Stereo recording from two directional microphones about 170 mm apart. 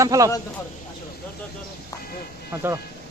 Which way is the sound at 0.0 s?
20° right (ahead or behind).